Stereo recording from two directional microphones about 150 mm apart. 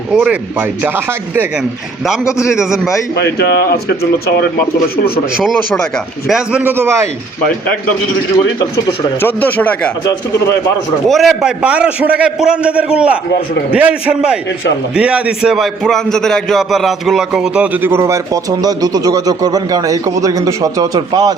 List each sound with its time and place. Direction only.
0.1 s a man's voice: 5° right (ahead or behind)
3.2 s speech: 90° left
6.2 s a man's voice: 5° right (ahead or behind)
6.6 s a man's voice: 15° right (ahead or behind)
9.2 s speech: 10° left (ahead or behind)
11.1 s a man's voice: centre (ahead or behind); by 21.3 s 25° right (ahead or behind)